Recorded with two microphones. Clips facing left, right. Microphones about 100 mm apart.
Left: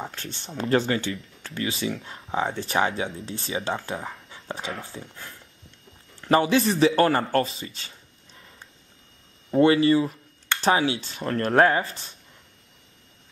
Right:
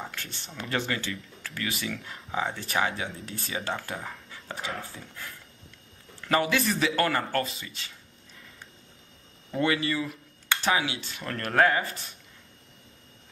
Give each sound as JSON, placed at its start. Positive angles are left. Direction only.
{"t": 0.0, "sound": "speech", "side_deg": 30}
{"t": 9.5, "sound": "speech", "side_deg": 30}